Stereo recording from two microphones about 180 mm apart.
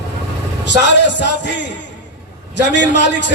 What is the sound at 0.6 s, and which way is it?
A man's voice, 75° left (ahead or behind).